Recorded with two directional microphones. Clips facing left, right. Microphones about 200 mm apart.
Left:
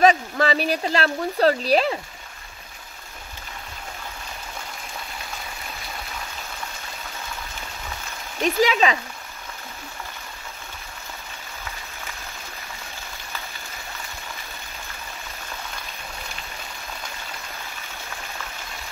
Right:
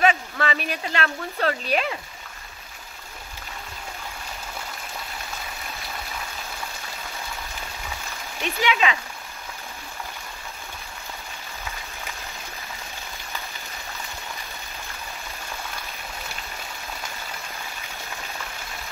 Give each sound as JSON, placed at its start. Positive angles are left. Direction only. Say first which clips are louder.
{"t": 0.0, "sound": "speech", "louder": "left 4 dB", "side_deg": 35}
{"t": 8.4, "sound": "speech", "louder": "left 5 dB", "side_deg": 35}